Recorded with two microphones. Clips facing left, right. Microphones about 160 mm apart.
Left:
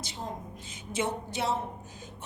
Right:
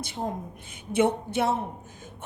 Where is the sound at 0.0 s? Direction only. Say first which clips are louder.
Right 6 dB; 55° right (ahead or behind).